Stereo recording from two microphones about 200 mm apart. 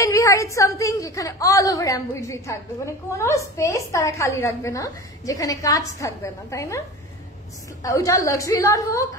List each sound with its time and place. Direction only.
0.0 s a woman's voice: 15° left (ahead or behind)
7.8 s a woman's voice: 15° left (ahead or behind)